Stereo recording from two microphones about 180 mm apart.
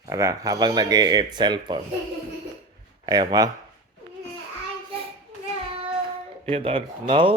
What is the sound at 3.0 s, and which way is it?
Speech, 25° right (ahead or behind).